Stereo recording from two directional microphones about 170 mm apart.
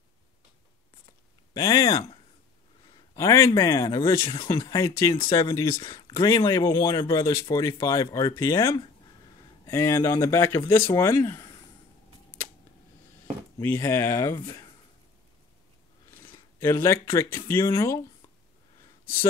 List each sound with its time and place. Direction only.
1.5 s speech: 20° left (ahead or behind)
3.2 s speech: 20° left (ahead or behind)
4.3 s speech: 30° left (ahead or behind)
13.6 s speech: 15° left (ahead or behind)
16.5 s speech: 15° left (ahead or behind)